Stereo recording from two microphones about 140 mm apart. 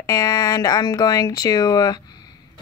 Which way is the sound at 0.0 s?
25° left (ahead or behind).